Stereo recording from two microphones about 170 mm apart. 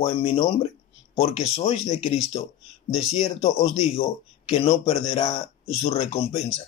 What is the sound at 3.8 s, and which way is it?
Speech, 35° left (ahead or behind).